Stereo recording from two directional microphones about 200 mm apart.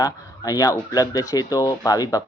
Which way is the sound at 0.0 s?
20° left (ahead or behind).